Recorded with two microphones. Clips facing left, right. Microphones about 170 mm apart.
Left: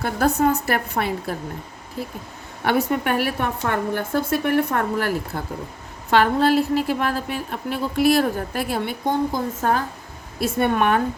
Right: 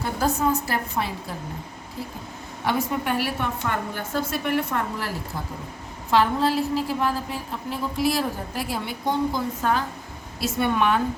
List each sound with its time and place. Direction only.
0.0 s a woman's voice: 65° left (ahead or behind)
2.6 s a woman's voice: 70° left (ahead or behind); by 11.0 s 55° left (ahead or behind)